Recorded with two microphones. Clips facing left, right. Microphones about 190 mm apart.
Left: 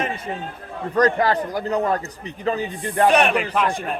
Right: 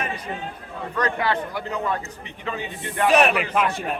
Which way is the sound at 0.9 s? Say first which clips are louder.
Left 6 dB; 40° left (ahead or behind).